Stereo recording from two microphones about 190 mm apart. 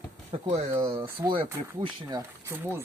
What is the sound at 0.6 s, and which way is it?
Speech, 25° right (ahead or behind).